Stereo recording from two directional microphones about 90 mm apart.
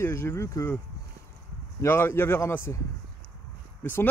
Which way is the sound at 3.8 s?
25° left (ahead or behind).